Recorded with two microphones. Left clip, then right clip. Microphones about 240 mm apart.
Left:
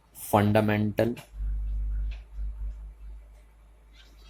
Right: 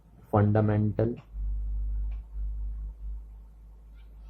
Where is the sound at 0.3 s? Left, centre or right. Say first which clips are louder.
Left 3 dB; left.